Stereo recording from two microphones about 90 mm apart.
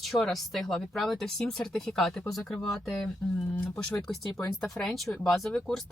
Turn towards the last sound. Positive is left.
turn(degrees=5)  # may be behind; listen again after turning